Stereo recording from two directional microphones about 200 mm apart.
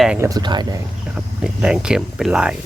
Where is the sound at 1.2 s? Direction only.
5° right (ahead or behind).